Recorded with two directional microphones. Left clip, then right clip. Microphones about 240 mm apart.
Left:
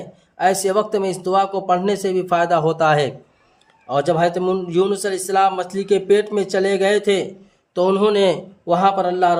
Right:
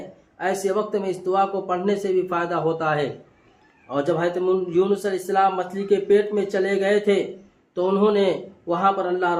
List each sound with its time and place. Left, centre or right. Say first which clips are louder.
0.3 s a man's voice: left 6 dB; left